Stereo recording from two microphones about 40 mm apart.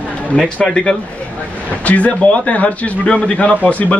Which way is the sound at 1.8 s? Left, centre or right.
Left.